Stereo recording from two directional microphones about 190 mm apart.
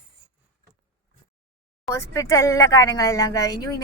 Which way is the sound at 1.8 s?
15° left (ahead or behind).